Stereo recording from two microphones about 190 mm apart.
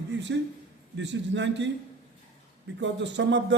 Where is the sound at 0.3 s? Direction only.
70° right (ahead or behind).